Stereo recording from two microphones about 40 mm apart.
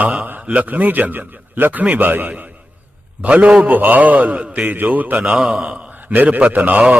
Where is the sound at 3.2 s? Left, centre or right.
Right.